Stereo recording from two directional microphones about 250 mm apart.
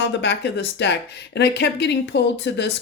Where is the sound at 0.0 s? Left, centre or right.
Left.